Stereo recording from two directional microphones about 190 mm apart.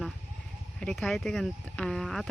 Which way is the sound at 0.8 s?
Centre (ahead or behind).